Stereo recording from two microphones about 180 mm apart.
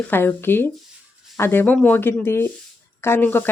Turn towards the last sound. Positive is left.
turn(degrees=10)  # may be behind; listen again after turning